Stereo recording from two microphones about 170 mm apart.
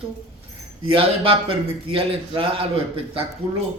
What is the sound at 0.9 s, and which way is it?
A man's voice, 30° right (ahead or behind).